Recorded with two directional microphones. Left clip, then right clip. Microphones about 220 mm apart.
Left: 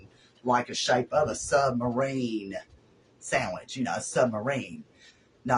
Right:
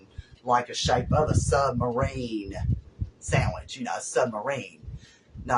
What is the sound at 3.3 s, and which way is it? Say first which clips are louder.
Speech: even; 15° right (ahead or behind).